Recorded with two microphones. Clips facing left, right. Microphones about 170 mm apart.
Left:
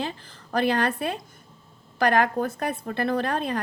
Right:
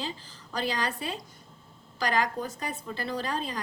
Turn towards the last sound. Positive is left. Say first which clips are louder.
# left 7 dB
turn(degrees=60)  # may be behind; listen again after turning